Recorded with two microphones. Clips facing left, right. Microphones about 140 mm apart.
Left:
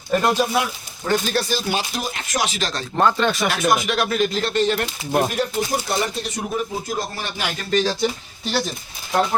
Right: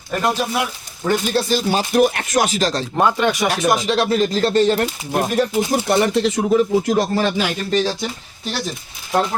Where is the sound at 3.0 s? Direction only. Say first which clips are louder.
Right 1 dB; 10° right (ahead or behind).